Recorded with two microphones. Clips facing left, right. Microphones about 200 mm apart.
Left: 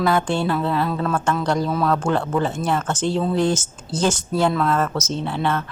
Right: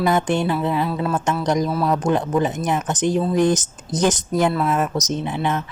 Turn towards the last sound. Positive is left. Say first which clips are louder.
# even
turn(degrees=-15)  # may be behind; listen again after turning